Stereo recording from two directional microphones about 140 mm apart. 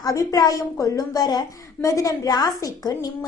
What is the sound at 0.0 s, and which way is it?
A woman's voice, 25° left (ahead or behind).